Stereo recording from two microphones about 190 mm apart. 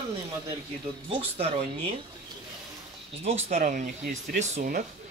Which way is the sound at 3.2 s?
35° right (ahead or behind).